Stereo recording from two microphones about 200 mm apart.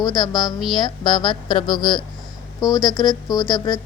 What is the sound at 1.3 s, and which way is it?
Speech, 25° left (ahead or behind).